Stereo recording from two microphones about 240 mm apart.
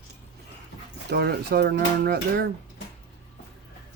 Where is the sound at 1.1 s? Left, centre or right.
Right.